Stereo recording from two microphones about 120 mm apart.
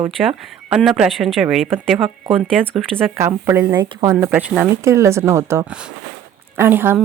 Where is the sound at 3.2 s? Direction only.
20° right (ahead or behind).